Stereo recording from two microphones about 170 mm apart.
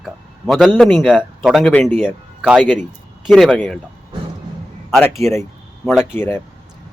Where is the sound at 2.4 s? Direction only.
Centre (ahead or behind).